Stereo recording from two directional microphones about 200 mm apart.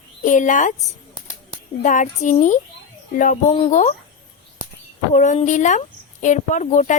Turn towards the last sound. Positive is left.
turn(degrees=35)  # may be behind; listen again after turning